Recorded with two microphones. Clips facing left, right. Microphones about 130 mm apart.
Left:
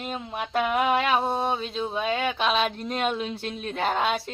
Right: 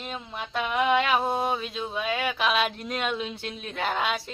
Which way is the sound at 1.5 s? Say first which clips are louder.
Left 2 dB; 30° left (ahead or behind).